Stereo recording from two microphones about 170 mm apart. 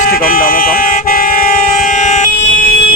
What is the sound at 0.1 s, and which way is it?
Vehicle, 55° left (ahead or behind).